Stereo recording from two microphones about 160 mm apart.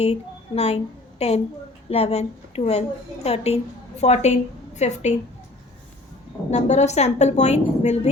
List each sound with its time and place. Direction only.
0.0 s a woman's voice: 40° left (ahead or behind)
6.5 s a woman's voice: 45° left (ahead or behind)